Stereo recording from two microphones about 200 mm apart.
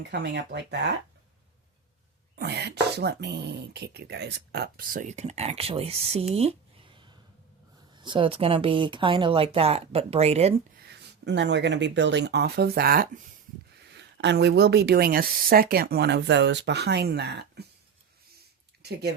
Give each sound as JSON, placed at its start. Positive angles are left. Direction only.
{"t": 0.1, "sound": "speech", "side_deg": -60}
{"t": 2.3, "sound": "speech", "side_deg": -55}
{"t": 6.3, "sound": "a sound", "side_deg": -30}
{"t": 7.9, "sound": "speech", "side_deg": -25}
{"t": 10.8, "sound": "speech", "side_deg": -55}
{"t": 13.9, "sound": "speech", "side_deg": -60}
{"t": 18.8, "sound": "speech", "side_deg": -55}